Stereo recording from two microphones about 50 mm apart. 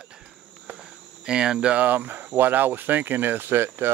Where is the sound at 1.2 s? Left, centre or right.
Centre.